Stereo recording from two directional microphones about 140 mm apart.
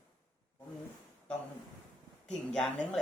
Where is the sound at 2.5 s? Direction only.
5° left (ahead or behind).